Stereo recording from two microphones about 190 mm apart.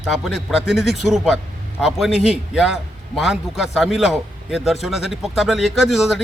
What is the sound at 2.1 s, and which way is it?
Speech, 35° left (ahead or behind).